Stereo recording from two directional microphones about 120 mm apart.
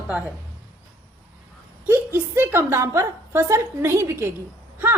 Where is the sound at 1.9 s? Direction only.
20° right (ahead or behind).